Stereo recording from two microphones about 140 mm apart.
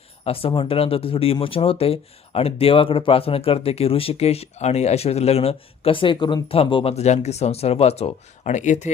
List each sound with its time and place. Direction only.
0.3 s speech: 40° left (ahead or behind); by 8.9 s 60° left (ahead or behind)